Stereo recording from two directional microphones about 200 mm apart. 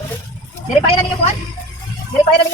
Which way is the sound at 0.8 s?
30° left (ahead or behind).